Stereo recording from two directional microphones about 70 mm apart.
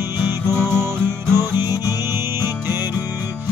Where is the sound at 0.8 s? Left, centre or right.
Right.